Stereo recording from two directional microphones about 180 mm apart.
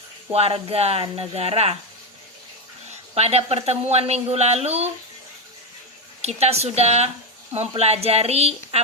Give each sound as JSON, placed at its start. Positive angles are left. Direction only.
{"t": 0.3, "sound": "a woman's voice", "side_deg": -35}
{"t": 2.9, "sound": "a woman's voice", "side_deg": -35}
{"t": 6.2, "sound": "a woman's voice", "side_deg": -35}